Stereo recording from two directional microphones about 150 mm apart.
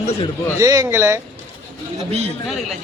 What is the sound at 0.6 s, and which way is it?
Speech, 20° right (ahead or behind).